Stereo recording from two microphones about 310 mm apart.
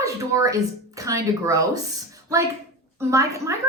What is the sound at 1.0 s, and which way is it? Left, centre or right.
Speech, centre.